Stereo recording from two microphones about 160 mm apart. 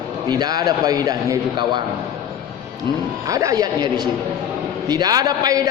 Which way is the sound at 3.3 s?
20° right (ahead or behind).